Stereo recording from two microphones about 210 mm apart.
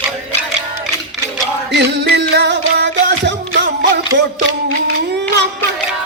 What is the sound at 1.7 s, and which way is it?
Music, 55° right (ahead or behind).